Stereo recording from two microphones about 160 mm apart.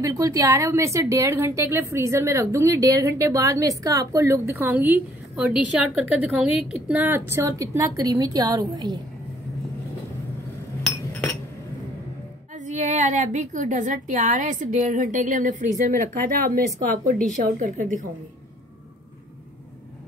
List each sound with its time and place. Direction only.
0.0 s a woman's voice: 20° right (ahead or behind)
10.8 s chink: 5° left (ahead or behind)
12.5 s a woman's voice: 50° right (ahead or behind)